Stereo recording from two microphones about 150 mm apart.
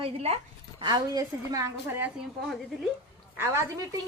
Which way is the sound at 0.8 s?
25° right (ahead or behind).